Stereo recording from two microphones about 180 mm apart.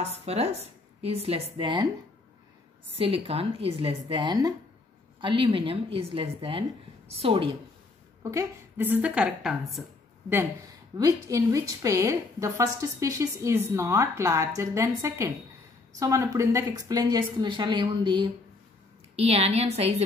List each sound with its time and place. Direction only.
0.0 s a woman's voice: 35° right (ahead or behind)
3.0 s a woman's voice: 30° right (ahead or behind)
8.2 s a woman's voice: 15° right (ahead or behind)
11.0 s a woman's voice: 20° right (ahead or behind); by 19.9 s 35° right (ahead or behind)